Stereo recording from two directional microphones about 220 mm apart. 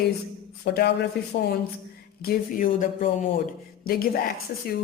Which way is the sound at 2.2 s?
40° left (ahead or behind).